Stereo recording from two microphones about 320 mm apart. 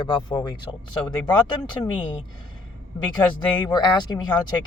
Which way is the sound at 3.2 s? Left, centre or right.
Centre.